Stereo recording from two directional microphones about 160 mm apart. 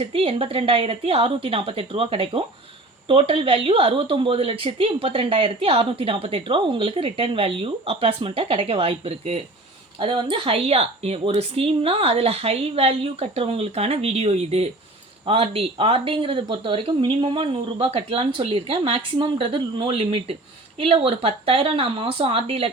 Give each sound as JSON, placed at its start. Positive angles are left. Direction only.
{"t": 0.0, "sound": "speech", "side_deg": -35}